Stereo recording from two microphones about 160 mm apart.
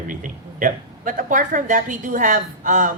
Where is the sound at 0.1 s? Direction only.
55° right (ahead or behind).